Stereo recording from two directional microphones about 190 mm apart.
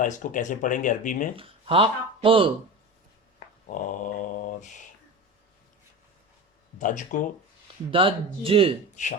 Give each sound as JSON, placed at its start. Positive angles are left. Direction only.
{"t": 0.0, "sound": "speech", "side_deg": 45}
{"t": 1.4, "sound": "speech", "side_deg": -30}
{"t": 3.7, "sound": "mantra", "side_deg": 45}
{"t": 6.7, "sound": "speech", "side_deg": 40}
{"t": 7.9, "sound": "speech", "side_deg": -30}